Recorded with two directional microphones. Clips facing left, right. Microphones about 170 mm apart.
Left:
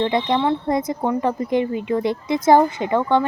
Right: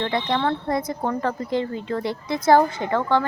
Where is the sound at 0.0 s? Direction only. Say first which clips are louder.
Left 4 dB; 20° left (ahead or behind).